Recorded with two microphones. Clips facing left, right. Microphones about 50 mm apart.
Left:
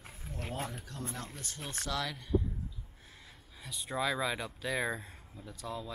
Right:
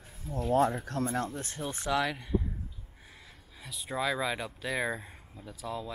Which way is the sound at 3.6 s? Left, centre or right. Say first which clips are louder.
Right 2 dB; centre.